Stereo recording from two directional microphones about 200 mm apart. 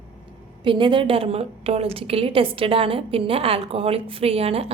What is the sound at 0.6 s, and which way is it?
A woman's voice, 25° right (ahead or behind).